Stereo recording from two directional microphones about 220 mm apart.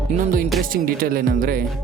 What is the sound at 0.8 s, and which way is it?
Speech, 40° right (ahead or behind).